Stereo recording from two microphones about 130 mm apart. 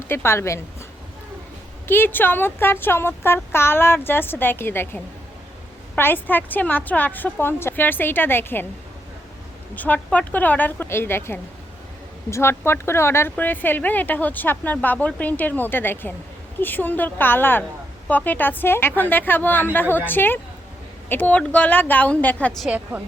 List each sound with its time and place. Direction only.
0.1 s a woman's voice: 20° left (ahead or behind)
1.9 s speech: 15° left (ahead or behind)
9.7 s speech: 10° left (ahead or behind)
22.6 s a woman's voice: 10° right (ahead or behind)